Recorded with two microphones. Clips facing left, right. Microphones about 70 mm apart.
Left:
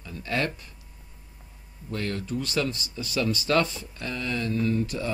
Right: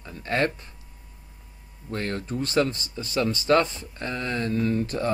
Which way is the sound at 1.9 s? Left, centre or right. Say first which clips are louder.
Right 1 dB; right.